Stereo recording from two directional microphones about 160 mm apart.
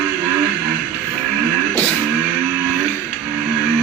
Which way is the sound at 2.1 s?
15° right (ahead or behind).